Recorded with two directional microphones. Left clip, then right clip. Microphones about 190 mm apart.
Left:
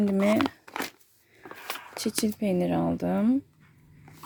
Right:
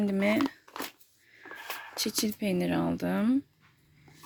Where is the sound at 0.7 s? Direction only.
15° left (ahead or behind).